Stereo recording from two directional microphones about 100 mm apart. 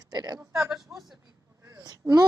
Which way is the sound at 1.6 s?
40° right (ahead or behind).